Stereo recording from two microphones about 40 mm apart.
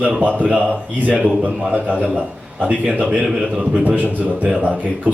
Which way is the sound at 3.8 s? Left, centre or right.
Right.